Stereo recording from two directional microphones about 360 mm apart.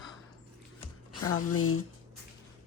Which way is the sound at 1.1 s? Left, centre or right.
Left.